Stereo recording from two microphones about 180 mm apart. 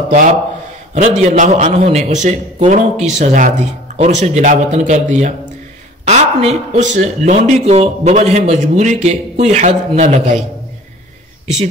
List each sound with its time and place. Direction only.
0.9 s a man's voice: 40° right (ahead or behind)